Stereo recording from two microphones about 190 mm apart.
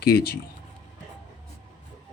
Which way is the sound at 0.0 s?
55° left (ahead or behind).